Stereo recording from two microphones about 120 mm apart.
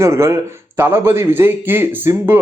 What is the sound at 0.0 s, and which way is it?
A man's voice, 25° right (ahead or behind).